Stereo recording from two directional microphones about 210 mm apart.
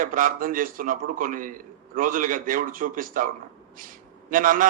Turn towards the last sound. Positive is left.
turn(degrees=-40)  # may be behind; listen again after turning